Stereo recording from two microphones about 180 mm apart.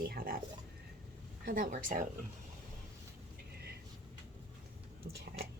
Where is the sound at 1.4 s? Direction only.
50° right (ahead or behind).